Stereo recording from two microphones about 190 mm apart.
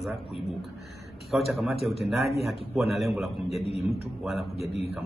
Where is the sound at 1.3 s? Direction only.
Centre (ahead or behind).